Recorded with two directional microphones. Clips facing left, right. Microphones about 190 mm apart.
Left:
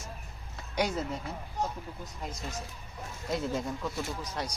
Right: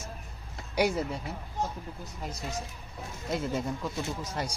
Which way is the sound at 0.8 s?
10° right (ahead or behind).